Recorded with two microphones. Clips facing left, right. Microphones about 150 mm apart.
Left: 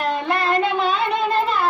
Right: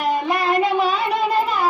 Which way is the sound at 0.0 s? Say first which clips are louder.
Right 1 dB; 10° right (ahead or behind).